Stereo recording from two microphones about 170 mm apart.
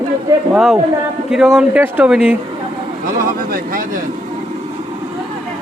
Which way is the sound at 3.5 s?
55° right (ahead or behind).